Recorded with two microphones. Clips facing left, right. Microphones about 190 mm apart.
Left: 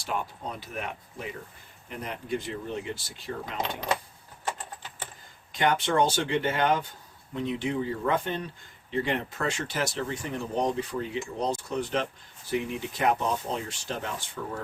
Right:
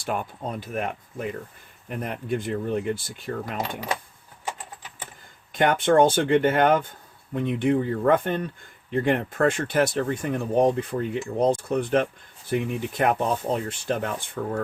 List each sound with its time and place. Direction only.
0.0 s speech: 50° right (ahead or behind)
5.5 s speech: 50° right (ahead or behind)